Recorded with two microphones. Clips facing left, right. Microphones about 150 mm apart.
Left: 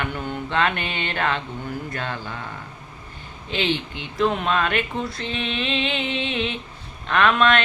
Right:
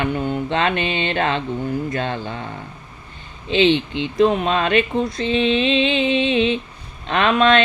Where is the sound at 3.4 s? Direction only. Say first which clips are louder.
Right 8 dB; 20° right (ahead or behind).